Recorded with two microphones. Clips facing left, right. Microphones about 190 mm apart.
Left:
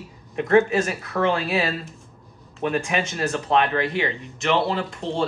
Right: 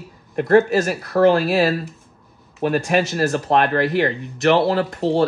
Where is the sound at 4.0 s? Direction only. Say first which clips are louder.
Right 6 dB; 55° right (ahead or behind).